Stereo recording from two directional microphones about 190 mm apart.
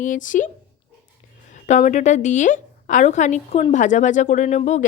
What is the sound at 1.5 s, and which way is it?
A woman's voice, 40° left (ahead or behind).